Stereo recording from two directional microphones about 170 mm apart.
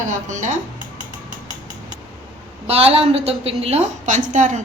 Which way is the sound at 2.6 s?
35° right (ahead or behind).